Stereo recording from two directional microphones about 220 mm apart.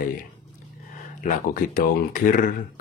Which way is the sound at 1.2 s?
35° left (ahead or behind).